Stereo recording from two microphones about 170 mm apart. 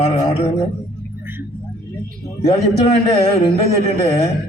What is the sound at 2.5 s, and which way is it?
Speech, 35° left (ahead or behind).